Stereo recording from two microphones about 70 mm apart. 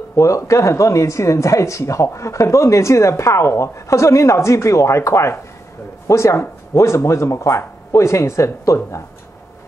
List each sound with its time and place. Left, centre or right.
0.1 s speech: left